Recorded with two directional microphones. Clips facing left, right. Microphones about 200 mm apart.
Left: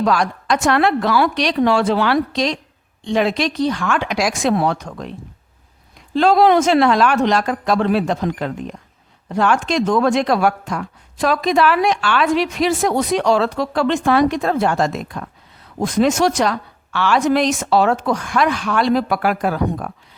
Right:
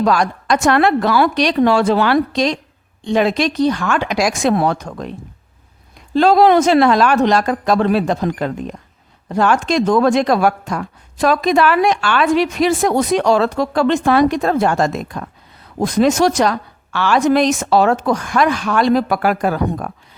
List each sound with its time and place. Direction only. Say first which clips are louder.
0.0 s speech: right 2 dB; 45° right (ahead or behind)
6.1 s a woman's voice: right 2 dB; 40° right (ahead or behind)